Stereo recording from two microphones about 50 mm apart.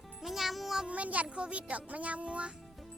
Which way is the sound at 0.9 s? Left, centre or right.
Right.